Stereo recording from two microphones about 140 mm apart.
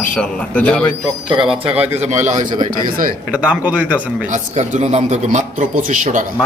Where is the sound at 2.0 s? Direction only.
55° right (ahead or behind).